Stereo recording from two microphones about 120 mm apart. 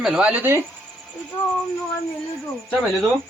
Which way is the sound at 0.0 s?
10° right (ahead or behind).